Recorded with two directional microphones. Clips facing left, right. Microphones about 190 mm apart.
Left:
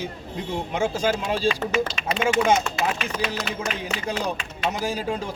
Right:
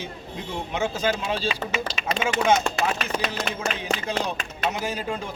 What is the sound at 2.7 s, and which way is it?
Chopping, 40° right (ahead or behind).